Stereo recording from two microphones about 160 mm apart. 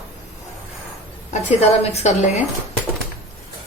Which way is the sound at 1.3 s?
45° left (ahead or behind).